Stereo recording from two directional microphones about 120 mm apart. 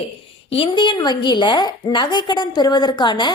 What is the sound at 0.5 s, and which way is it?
A woman's voice, 45° left (ahead or behind).